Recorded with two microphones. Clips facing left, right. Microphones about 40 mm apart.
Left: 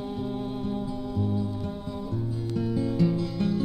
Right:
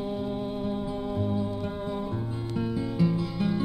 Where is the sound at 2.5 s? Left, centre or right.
Centre.